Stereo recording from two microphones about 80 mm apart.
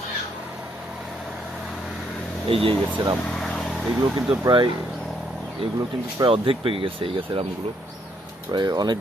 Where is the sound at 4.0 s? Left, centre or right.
Right.